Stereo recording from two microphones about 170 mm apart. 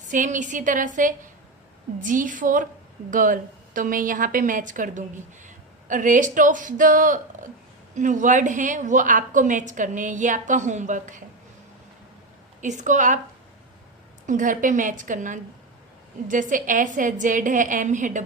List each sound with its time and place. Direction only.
0.1 s a woman's voice: 50° right (ahead or behind)
12.6 s a woman's voice: 45° right (ahead or behind)
14.3 s a woman's voice: 50° right (ahead or behind)